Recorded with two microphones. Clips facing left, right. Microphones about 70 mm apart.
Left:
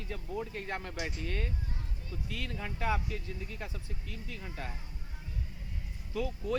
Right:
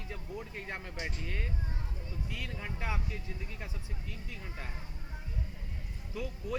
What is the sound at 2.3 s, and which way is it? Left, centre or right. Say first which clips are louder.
Speech: left 3 dB; centre.